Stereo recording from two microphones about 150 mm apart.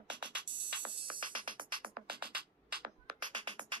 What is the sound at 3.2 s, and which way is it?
Music, 30° right (ahead or behind).